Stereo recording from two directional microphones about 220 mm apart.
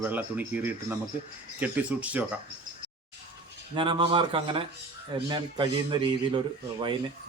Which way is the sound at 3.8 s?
20° right (ahead or behind).